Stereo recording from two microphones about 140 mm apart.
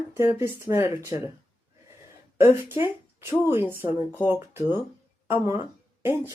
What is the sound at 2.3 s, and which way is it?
Speech, 15° right (ahead or behind).